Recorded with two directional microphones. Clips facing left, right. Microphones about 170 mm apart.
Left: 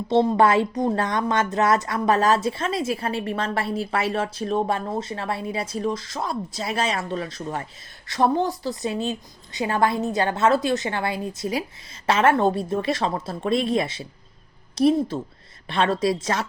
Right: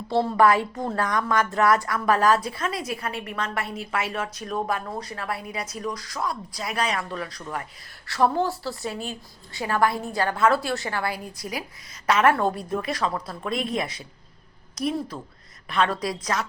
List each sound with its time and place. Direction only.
0.1 s a woman's voice: 20° left (ahead or behind)